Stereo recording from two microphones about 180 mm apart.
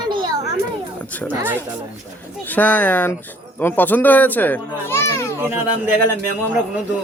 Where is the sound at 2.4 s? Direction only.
10° left (ahead or behind).